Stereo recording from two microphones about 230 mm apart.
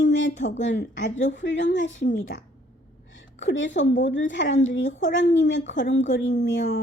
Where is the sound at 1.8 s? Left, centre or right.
Left.